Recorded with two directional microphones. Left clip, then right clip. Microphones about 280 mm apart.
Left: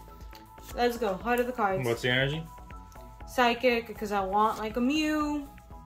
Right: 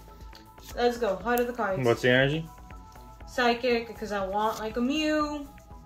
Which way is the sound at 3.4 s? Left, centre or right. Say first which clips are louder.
Even; left.